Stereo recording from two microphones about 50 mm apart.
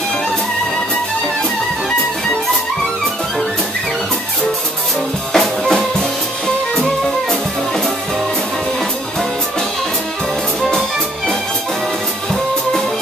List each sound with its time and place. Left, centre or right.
5.3 s drum kit: centre